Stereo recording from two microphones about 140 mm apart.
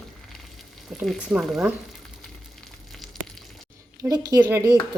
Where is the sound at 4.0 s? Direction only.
25° right (ahead or behind).